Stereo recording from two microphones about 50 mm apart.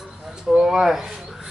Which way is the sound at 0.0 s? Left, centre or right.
Centre.